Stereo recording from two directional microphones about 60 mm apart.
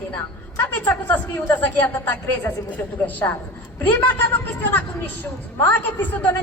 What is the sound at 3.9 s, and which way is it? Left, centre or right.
A man's voice, left.